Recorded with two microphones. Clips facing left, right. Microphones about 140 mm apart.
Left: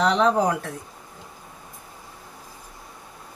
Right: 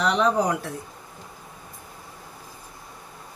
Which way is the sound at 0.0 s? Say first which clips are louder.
Left 2 dB; centre (ahead or behind).